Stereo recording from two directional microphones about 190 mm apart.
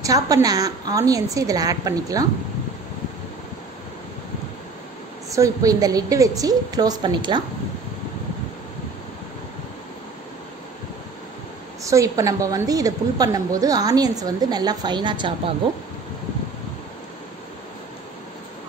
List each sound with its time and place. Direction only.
0.0 s a woman's voice: 20° right (ahead or behind)
5.3 s a woman's voice: 15° right (ahead or behind)
11.8 s a woman's voice: 15° right (ahead or behind)